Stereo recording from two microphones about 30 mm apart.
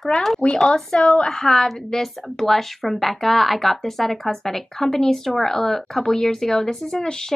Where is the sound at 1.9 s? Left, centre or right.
Centre.